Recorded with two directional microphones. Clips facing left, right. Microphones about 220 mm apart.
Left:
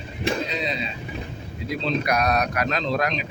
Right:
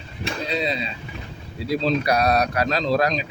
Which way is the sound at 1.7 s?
35° right (ahead or behind).